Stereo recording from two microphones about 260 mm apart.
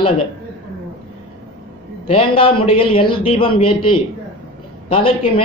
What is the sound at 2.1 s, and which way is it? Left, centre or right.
A man's voice, centre.